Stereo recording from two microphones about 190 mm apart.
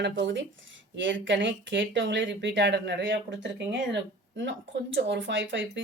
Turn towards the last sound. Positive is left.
turn(degrees=-75)  # may be behind; listen again after turning